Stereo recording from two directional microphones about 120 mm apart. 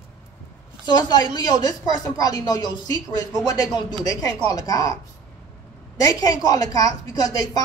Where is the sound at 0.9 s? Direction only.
35° left (ahead or behind).